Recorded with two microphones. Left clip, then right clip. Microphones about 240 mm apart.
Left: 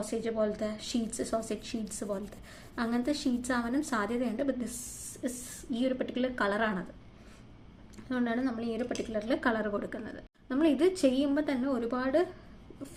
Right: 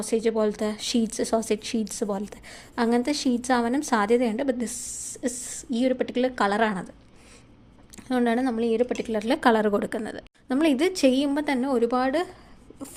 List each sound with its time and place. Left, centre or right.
0.1 s a woman's voice: right
7.9 s a woman's voice: right